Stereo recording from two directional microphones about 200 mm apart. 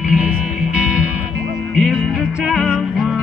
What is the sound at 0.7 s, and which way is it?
Music, 5° right (ahead or behind).